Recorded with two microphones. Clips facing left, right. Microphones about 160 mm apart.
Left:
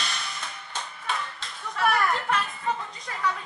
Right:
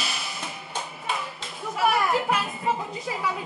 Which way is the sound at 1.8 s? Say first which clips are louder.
Right 2 dB; 5° right (ahead or behind).